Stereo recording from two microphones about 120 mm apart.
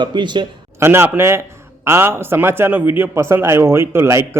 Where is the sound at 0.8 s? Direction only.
20° right (ahead or behind).